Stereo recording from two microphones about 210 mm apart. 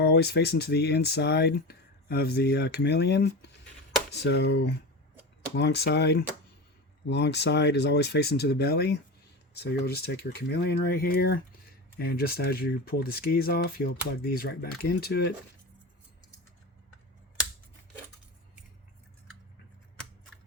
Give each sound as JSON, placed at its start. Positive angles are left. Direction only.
{"t": 0.0, "sound": "speech", "side_deg": 50}